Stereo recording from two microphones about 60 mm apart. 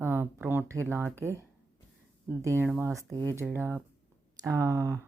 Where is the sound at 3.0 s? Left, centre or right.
Right.